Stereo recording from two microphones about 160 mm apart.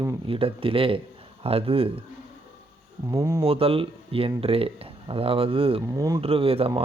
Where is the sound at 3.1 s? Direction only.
20° right (ahead or behind).